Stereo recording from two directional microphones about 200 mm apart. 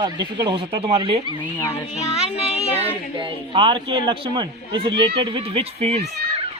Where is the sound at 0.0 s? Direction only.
20° right (ahead or behind).